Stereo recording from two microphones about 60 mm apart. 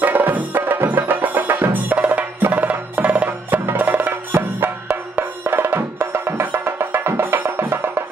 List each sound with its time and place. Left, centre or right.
0.0 s music: right